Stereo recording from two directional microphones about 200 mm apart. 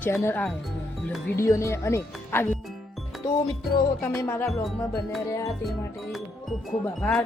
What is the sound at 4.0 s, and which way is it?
Speech, 10° left (ahead or behind).